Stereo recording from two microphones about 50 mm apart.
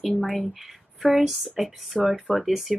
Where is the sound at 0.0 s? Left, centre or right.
Centre.